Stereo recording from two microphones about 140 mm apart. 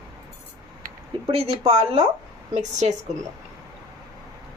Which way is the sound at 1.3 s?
45° right (ahead or behind).